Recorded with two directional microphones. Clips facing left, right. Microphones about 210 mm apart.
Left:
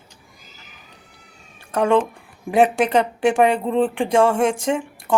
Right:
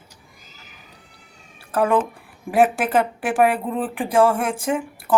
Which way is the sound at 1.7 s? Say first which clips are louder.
Left 2 dB; 5° right (ahead or behind).